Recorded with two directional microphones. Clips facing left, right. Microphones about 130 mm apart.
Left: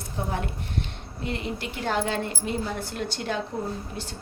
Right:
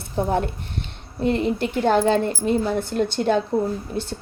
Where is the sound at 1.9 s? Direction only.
40° right (ahead or behind).